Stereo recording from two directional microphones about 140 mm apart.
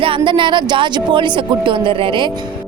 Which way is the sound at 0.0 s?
35° right (ahead or behind).